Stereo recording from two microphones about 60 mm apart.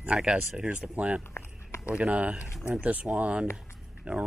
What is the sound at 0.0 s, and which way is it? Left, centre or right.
Speech, centre.